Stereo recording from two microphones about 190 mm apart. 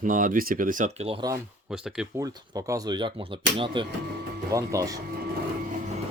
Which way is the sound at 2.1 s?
20° right (ahead or behind).